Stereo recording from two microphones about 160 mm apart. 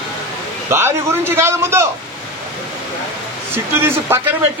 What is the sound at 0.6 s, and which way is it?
Speech, 15° right (ahead or behind).